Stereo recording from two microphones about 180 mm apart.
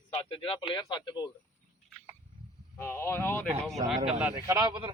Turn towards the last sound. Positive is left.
turn(degrees=-25)  # may be behind; listen again after turning